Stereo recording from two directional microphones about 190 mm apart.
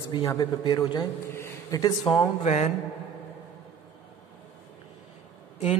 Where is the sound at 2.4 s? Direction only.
35° left (ahead or behind).